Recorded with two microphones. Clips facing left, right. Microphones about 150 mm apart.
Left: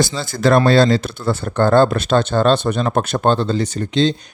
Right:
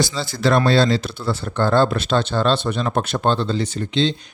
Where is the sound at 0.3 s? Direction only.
50° left (ahead or behind).